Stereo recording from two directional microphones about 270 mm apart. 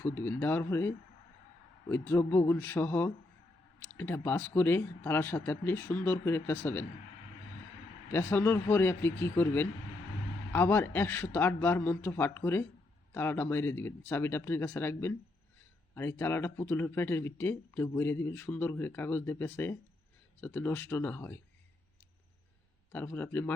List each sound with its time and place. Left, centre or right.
0.0 s speech: centre
8.1 s speech: centre
22.9 s speech: centre